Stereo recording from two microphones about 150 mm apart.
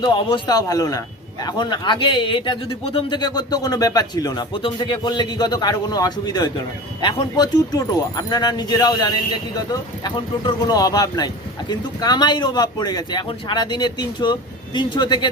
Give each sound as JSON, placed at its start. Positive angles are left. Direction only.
{"t": 0.0, "sound": "a man's voice", "side_deg": 30}